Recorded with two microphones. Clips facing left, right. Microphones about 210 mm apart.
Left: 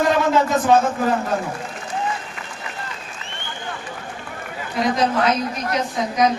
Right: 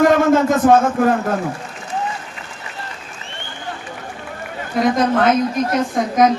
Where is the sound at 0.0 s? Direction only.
50° right (ahead or behind).